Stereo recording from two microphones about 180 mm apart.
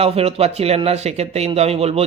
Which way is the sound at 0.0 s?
35° right (ahead or behind).